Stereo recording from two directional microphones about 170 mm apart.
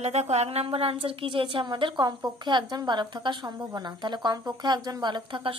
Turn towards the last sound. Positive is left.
turn(degrees=-30)  # may be behind; listen again after turning